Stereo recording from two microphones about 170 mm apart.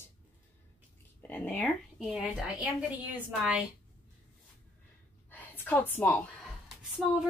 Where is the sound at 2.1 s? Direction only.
5° right (ahead or behind).